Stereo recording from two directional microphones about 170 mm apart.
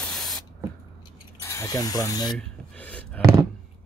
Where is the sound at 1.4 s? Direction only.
15° left (ahead or behind).